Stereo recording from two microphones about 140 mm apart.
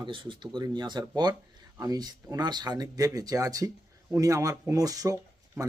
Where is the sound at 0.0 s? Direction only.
35° right (ahead or behind).